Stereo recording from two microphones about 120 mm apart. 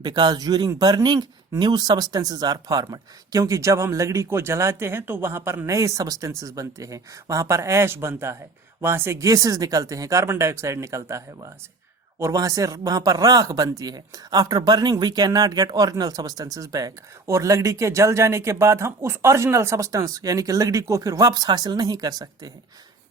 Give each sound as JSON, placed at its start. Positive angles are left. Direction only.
{"t": 0.0, "sound": "speech", "side_deg": -35}
{"t": 12.2, "sound": "speech", "side_deg": -30}